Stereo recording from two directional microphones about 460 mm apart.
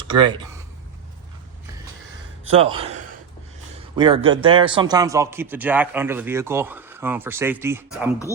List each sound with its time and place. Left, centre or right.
0.1 s speech: centre
2.5 s a man's voice: centre